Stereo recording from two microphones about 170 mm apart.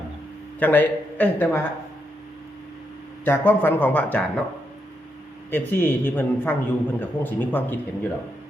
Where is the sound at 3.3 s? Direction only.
10° left (ahead or behind).